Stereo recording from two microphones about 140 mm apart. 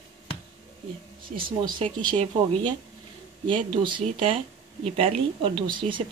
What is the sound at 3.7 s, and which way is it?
Speech, 35° right (ahead or behind).